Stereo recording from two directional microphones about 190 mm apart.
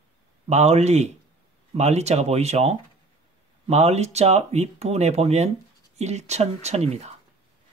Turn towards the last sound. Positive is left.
turn(degrees=-35)  # may be behind; listen again after turning